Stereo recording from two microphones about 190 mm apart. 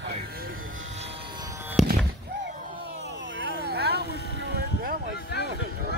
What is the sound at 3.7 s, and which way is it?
Vehicle, 60° right (ahead or behind).